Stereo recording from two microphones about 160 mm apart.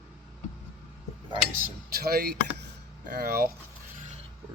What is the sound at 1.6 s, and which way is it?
Speech, 75° right (ahead or behind).